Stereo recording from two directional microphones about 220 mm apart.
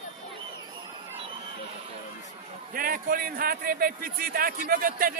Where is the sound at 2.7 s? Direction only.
40° right (ahead or behind).